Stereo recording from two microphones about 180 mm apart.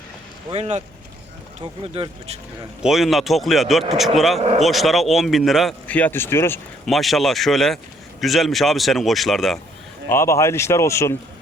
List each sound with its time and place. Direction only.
0.5 s speech: 40° right (ahead or behind)
1.8 s speech: 35° right (ahead or behind)
2.8 s speech: centre (ahead or behind)
4.4 s speech: 35° right (ahead or behind)
4.6 s speech: centre (ahead or behind)
6.8 s speech: centre (ahead or behind)
10.1 s speech: 15° left (ahead or behind)